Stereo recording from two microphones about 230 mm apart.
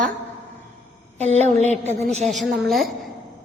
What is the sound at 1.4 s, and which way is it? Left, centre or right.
Speech, right.